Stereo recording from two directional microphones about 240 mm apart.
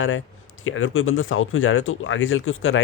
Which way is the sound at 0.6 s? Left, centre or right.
Left.